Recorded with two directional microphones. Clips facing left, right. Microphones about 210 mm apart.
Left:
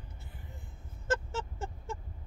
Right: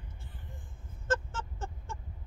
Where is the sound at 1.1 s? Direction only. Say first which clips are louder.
Even; 10° left (ahead or behind).